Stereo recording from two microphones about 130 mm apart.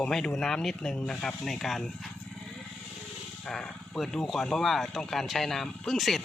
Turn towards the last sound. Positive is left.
turn(degrees=0)  # may be behind; listen again after turning